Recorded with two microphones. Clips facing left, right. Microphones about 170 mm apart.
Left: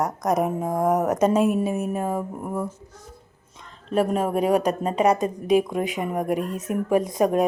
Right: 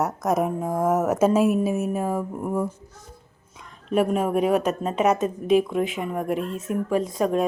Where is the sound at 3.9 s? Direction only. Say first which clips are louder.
Right 1 dB; 5° right (ahead or behind).